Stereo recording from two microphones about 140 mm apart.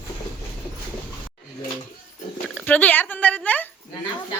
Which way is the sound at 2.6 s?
10° left (ahead or behind).